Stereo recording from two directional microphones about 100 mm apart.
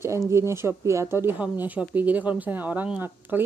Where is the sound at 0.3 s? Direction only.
25° right (ahead or behind).